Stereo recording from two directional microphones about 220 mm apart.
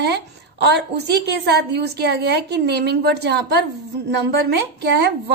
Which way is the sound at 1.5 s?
50° right (ahead or behind).